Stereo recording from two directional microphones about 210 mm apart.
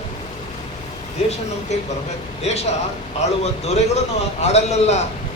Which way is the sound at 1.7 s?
30° left (ahead or behind).